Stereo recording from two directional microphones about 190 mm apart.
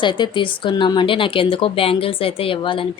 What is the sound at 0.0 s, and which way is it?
Speech, 25° left (ahead or behind).